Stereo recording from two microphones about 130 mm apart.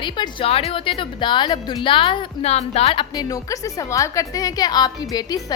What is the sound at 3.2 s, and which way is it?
A woman's voice, 30° left (ahead or behind).